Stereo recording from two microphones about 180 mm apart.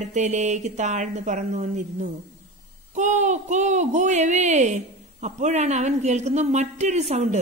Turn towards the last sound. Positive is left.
turn(degrees=-35)  # may be behind; listen again after turning